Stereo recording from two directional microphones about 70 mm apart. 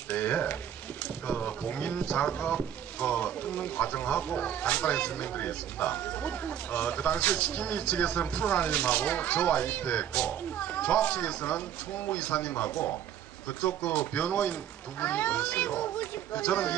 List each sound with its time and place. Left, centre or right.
0.1 s speech: left